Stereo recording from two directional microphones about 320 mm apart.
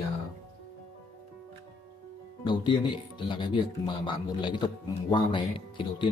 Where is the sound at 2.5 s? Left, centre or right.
Centre.